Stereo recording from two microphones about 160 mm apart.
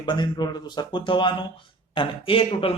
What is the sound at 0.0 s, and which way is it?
A man's voice, 30° left (ahead or behind).